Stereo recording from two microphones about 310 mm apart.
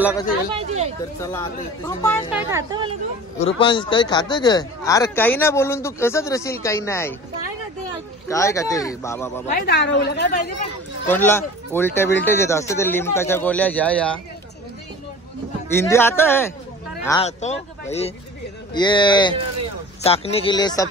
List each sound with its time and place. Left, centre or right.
0.6 s speech: right
1.2 s speech: centre
2.3 s a woman's voice: centre
3.4 s speech: centre
8.3 s speech: centre
9.5 s a woman's voice: left
11.1 s speech: centre
15.8 s a man's voice: centre
17.2 s speech: left